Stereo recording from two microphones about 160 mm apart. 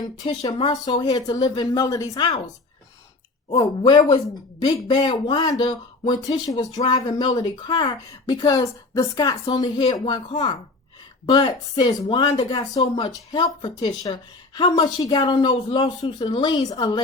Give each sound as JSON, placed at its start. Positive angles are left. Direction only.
{"t": 0.0, "sound": "speech", "side_deg": 25}
{"t": 3.5, "sound": "speech", "side_deg": 25}